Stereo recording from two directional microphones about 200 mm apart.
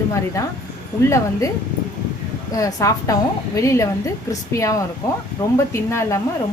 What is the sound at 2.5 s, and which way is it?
A woman's voice, 15° left (ahead or behind).